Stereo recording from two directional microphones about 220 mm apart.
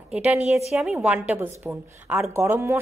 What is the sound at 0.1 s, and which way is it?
A woman's voice, 5° right (ahead or behind).